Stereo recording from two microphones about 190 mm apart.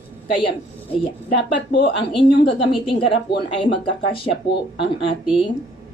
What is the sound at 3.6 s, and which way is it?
Speech, 25° left (ahead or behind).